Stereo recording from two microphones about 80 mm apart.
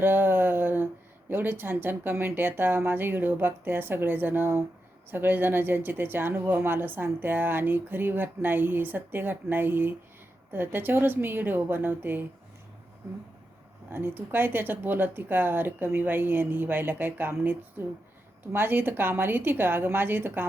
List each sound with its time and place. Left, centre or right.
0.0 s a sound: right
1.3 s speech: right
13.9 s speech: right